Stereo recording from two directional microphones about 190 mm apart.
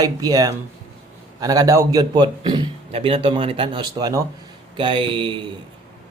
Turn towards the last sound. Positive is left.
turn(degrees=-25)  # may be behind; listen again after turning